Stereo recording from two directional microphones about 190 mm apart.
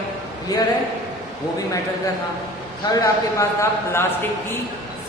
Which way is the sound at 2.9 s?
15° left (ahead or behind).